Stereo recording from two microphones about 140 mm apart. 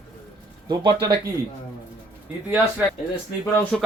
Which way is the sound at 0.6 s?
30° right (ahead or behind).